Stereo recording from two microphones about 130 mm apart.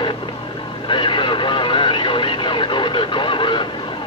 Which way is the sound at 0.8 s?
40° left (ahead or behind).